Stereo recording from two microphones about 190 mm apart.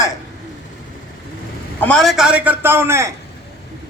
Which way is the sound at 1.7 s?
5° left (ahead or behind).